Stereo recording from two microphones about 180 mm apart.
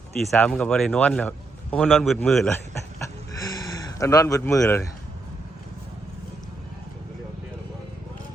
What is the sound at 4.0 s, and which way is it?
Speech, 20° left (ahead or behind).